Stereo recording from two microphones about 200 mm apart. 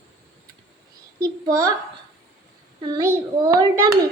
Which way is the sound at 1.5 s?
20° right (ahead or behind).